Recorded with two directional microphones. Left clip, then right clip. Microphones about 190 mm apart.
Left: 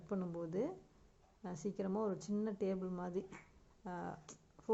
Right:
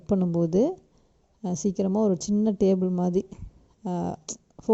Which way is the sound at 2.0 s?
45° right (ahead or behind).